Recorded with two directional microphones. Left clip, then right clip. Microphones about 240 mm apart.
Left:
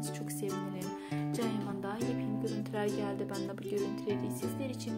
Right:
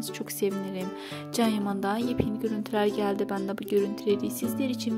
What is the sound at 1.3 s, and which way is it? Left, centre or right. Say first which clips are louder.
Speech: right 12 dB; right.